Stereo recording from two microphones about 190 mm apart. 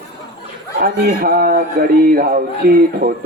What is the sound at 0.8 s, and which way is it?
Speech, 55° right (ahead or behind).